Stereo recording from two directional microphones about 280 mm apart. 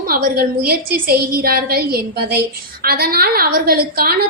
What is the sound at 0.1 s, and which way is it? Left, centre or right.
A woman's voice, right.